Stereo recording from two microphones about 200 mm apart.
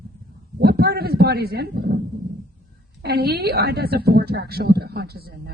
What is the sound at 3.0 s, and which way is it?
A woman's voice, 55° right (ahead or behind).